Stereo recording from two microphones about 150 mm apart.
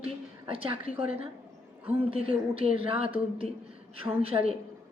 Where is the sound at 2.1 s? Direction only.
40° right (ahead or behind).